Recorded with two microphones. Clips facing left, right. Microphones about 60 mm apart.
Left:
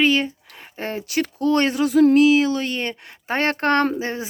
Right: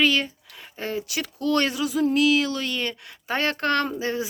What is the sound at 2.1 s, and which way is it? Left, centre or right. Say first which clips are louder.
Speech: left 6 dB; left.